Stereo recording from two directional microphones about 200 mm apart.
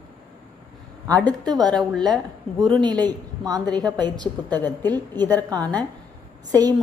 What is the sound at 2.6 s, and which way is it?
Speech, 25° right (ahead or behind).